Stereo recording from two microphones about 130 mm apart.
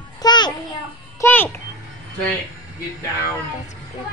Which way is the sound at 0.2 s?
35° left (ahead or behind).